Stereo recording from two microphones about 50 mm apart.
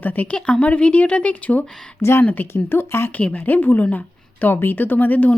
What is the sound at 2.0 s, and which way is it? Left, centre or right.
Speech, left.